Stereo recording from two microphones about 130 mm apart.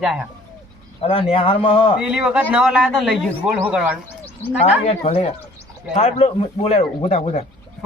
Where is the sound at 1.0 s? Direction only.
45° left (ahead or behind).